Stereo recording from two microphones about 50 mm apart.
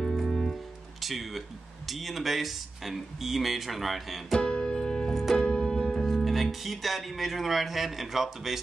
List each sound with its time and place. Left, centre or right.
0.0 s music: centre
1.0 s speech: centre
4.4 s music: centre
5.1 s music: centre
5.4 s music: centre
5.9 s speech: centre